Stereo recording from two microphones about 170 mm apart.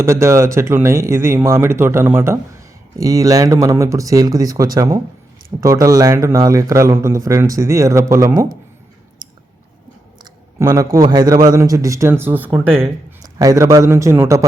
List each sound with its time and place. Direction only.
0.0 s speech: 15° right (ahead or behind)
10.6 s a man's voice: 20° right (ahead or behind)